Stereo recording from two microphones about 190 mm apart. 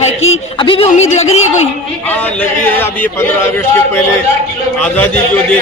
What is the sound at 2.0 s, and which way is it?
A man's voice, 10° left (ahead or behind).